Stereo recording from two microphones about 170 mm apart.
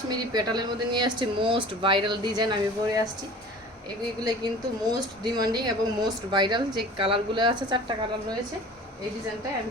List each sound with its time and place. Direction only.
0.1 s speech: 25° right (ahead or behind)
5.2 s speech: 25° right (ahead or behind)